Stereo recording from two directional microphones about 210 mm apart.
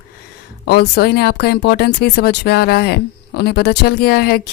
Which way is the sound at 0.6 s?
50° left (ahead or behind).